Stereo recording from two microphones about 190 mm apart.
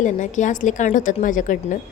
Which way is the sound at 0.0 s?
40° left (ahead or behind).